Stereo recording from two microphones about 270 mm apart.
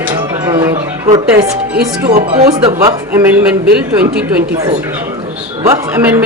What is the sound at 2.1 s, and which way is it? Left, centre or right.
Speech, right.